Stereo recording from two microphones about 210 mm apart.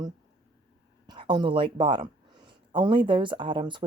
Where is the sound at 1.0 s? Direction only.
20° right (ahead or behind).